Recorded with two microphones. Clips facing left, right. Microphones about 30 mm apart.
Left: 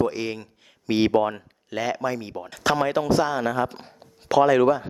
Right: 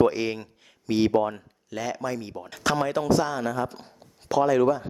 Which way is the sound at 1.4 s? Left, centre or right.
Left.